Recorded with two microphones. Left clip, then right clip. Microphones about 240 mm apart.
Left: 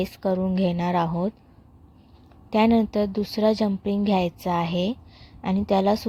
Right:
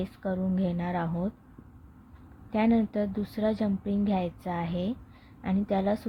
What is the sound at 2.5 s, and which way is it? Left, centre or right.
Speech, left.